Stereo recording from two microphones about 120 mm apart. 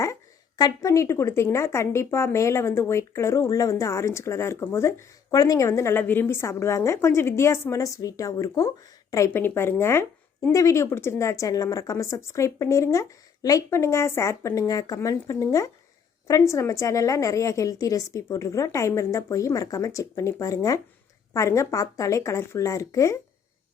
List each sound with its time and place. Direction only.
0.5 s a woman's voice: 30° left (ahead or behind)